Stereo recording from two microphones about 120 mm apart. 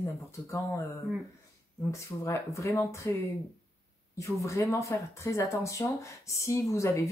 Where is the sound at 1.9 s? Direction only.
25° left (ahead or behind).